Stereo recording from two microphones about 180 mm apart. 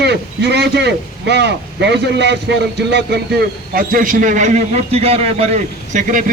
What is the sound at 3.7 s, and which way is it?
A man's voice, 50° right (ahead or behind).